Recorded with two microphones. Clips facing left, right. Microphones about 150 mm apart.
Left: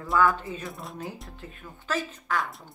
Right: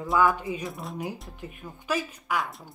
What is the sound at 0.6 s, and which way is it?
Speech, centre (ahead or behind).